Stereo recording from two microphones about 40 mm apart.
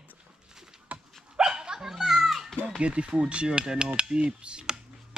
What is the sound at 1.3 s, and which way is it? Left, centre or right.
Dog, right.